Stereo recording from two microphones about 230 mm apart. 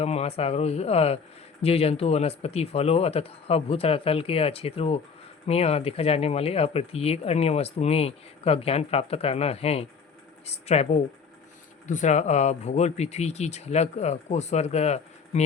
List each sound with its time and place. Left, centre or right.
0.0 s speech: left